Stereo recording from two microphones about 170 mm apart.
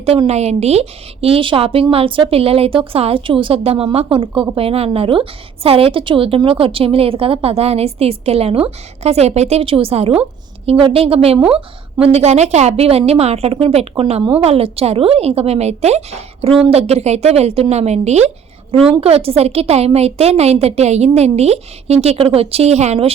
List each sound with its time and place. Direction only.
0.0 s a woman's voice: 35° right (ahead or behind)